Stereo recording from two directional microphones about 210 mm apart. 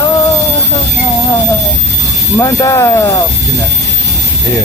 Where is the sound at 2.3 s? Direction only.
15° left (ahead or behind).